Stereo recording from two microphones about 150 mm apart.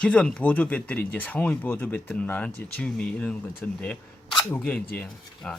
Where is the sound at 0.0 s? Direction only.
5° left (ahead or behind).